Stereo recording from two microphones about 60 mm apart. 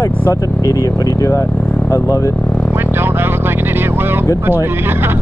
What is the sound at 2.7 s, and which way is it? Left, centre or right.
Vehicle, right.